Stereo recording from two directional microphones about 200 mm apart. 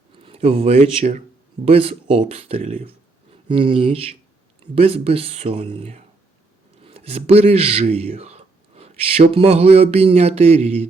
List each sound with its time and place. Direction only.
0.2 s speech: 30° right (ahead or behind)